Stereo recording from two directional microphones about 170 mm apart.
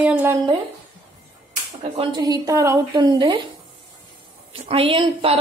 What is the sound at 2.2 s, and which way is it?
A woman's voice, 20° right (ahead or behind).